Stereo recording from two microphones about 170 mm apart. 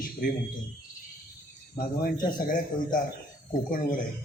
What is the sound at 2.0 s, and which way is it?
A man's voice, 55° left (ahead or behind).